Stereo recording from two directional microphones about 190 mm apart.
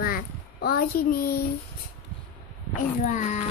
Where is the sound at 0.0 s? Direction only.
50° left (ahead or behind).